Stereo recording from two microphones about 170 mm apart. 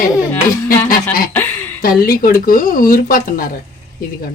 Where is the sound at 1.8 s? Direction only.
60° left (ahead or behind).